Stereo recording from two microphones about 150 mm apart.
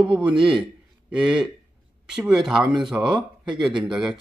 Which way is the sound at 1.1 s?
5° right (ahead or behind).